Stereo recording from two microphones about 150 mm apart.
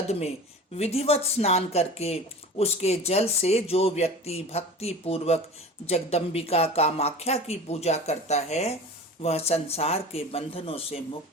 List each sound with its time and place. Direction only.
0.8 s speech: 45° left (ahead or behind)